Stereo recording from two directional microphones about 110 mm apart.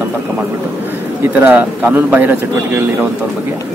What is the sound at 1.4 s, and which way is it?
Speech, 15° right (ahead or behind).